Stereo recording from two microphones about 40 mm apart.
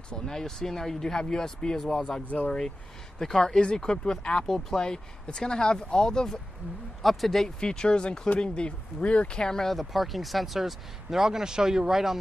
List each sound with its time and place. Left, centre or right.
0.1 s speech: centre
4.5 s speech: centre
7.0 s speech: centre
7.4 s speech: centre
9.4 s speech: centre
9.8 s speech: centre